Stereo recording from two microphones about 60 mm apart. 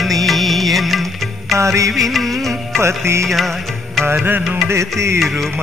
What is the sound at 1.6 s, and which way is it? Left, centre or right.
Music, right.